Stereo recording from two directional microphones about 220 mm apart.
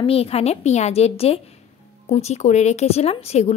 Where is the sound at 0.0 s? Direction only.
25° left (ahead or behind).